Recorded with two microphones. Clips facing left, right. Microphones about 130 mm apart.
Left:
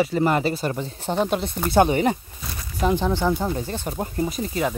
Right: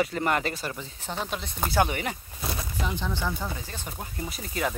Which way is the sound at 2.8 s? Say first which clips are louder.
Left 11 dB; 50° left (ahead or behind).